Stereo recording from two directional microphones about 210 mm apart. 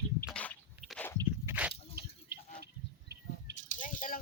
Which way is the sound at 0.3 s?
5° left (ahead or behind).